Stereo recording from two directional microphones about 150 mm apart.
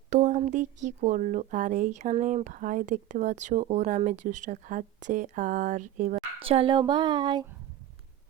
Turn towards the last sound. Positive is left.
turn(degrees=-30)  # may be behind; listen again after turning